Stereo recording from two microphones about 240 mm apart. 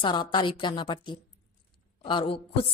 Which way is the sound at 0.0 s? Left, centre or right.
Centre.